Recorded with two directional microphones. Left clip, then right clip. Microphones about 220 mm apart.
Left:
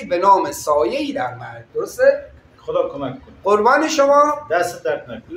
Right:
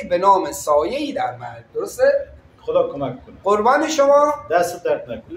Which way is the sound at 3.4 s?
5° left (ahead or behind).